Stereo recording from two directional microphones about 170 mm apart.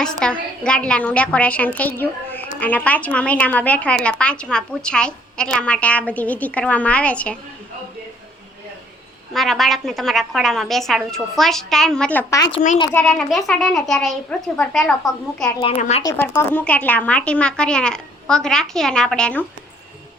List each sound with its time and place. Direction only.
0.0 s a woman's voice: 5° left (ahead or behind)
9.3 s a woman's voice: centre (ahead or behind)
15.8 s speech: 40° left (ahead or behind)
16.1 s a woman's voice: 15° left (ahead or behind)